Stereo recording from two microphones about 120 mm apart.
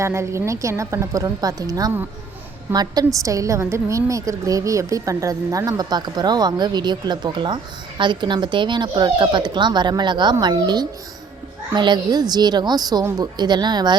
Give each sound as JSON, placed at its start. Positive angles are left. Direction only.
{"t": 0.0, "sound": "a woman's voice", "side_deg": -25}